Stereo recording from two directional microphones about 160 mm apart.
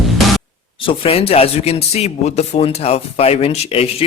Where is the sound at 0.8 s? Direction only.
35° left (ahead or behind).